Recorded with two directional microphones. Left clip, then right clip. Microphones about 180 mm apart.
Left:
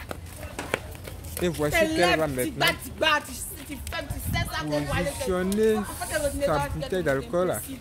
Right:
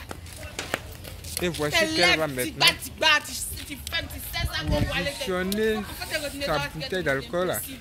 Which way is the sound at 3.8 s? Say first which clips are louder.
Right 3 dB; 25° left (ahead or behind).